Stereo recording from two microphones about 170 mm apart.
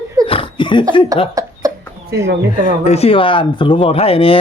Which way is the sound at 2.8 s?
40° left (ahead or behind).